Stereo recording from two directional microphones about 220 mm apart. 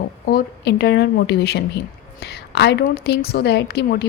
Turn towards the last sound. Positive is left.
turn(degrees=45)  # may be behind; listen again after turning